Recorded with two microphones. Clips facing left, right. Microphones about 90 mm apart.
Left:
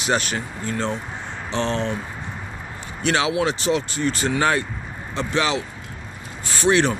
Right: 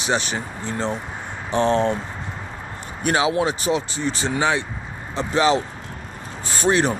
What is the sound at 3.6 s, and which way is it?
Speech, 30° right (ahead or behind).